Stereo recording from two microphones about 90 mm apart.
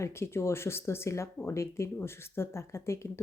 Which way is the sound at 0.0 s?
30° left (ahead or behind).